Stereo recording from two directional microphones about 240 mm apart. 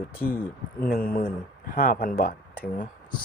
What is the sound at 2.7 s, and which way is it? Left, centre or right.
Speech, centre.